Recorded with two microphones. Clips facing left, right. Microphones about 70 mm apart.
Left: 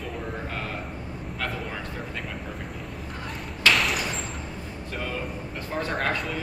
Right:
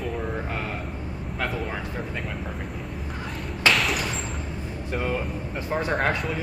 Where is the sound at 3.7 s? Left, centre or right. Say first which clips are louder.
Even; centre.